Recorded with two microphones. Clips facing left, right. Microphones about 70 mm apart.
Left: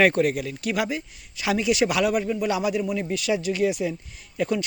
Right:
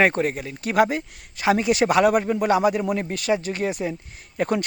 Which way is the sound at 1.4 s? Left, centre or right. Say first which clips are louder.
Right 3 dB; right.